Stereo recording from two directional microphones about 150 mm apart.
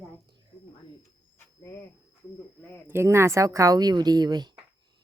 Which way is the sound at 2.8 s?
15° right (ahead or behind).